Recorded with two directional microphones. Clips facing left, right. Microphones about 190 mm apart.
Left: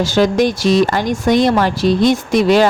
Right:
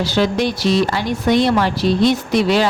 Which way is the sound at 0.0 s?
45° left (ahead or behind).